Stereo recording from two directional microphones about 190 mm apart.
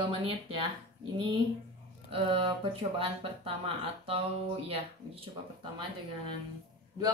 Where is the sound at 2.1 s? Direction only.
25° right (ahead or behind).